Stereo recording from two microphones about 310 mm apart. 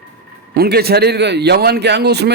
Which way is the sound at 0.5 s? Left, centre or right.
Right.